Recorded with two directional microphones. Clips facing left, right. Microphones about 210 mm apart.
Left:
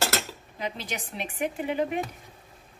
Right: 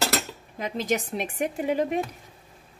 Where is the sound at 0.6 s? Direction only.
45° right (ahead or behind).